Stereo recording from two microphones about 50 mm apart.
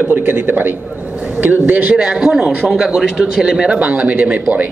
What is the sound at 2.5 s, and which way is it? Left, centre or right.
Speech, right.